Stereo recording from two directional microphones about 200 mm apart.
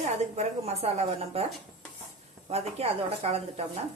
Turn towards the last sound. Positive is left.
turn(degrees=-30)  # may be behind; listen again after turning